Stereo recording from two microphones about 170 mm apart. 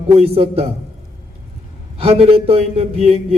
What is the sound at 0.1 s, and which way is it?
Speech, 35° right (ahead or behind).